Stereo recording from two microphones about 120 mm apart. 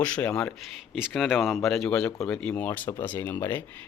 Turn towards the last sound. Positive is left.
turn(degrees=20)  # may be behind; listen again after turning